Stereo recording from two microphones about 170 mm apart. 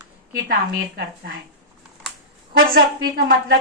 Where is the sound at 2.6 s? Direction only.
60° right (ahead or behind).